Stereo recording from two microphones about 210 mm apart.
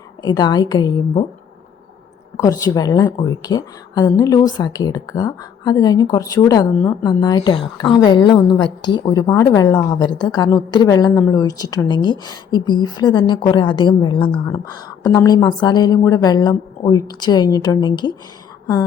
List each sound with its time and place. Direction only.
0.2 s a woman's voice: 20° left (ahead or behind)
2.4 s a woman's voice: 15° left (ahead or behind)